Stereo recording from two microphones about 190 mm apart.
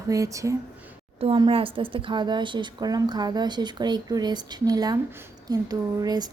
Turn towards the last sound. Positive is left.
turn(degrees=-20)  # may be behind; listen again after turning